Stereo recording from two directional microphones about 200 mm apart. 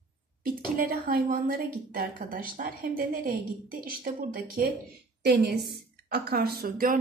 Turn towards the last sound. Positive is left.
turn(degrees=-45)  # may be behind; listen again after turning